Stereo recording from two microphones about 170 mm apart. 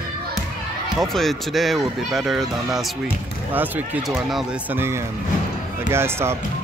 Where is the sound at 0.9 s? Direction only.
Centre (ahead or behind); by 6.3 s 15° right (ahead or behind).